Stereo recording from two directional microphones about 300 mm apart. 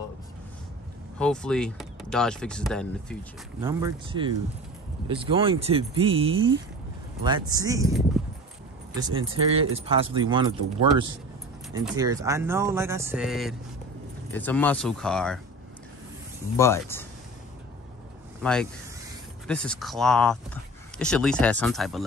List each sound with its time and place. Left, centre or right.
1.1 s speech: centre
3.6 s speech: centre
8.2 s a sound: centre
8.9 s speech: centre
16.5 s speech: centre
18.4 s speech: centre